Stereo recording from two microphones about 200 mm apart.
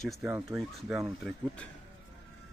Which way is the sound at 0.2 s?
15° right (ahead or behind).